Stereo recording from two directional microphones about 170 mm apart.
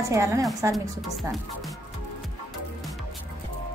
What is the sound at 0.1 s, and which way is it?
Speech, 20° right (ahead or behind).